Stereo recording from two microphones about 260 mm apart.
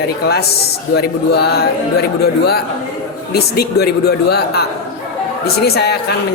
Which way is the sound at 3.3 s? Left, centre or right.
Left.